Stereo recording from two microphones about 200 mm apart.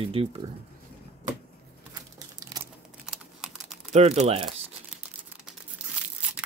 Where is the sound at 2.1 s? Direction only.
15° right (ahead or behind).